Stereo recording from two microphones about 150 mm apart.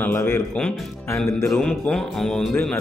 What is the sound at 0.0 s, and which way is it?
Speech, 15° left (ahead or behind).